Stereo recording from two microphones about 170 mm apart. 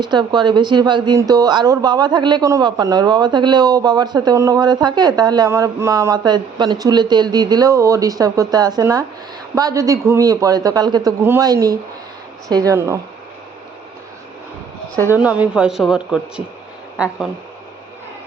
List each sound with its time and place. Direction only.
0.0 s speech: 25° right (ahead or behind)
15.1 s a man's voice: 10° right (ahead or behind)